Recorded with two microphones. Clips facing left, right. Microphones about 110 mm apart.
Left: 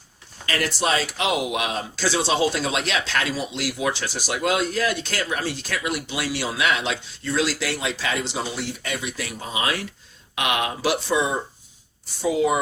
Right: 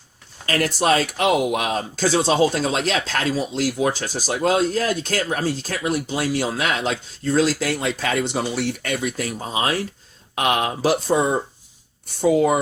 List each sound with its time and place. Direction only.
0.4 s speech: 40° right (ahead or behind)